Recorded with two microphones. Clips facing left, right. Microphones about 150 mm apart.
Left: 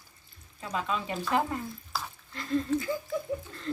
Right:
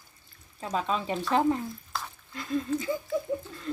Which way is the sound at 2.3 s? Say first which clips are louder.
Left 1 dB; 15° right (ahead or behind).